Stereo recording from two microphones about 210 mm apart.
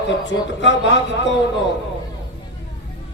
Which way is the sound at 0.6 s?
60° left (ahead or behind).